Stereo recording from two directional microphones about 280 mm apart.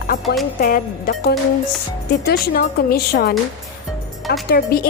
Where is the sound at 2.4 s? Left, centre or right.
Left.